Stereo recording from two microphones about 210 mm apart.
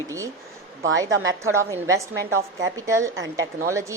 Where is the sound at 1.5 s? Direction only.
15° right (ahead or behind).